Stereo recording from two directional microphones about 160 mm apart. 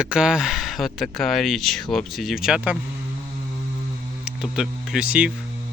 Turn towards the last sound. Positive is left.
turn(degrees=-5)  # may be behind; listen again after turning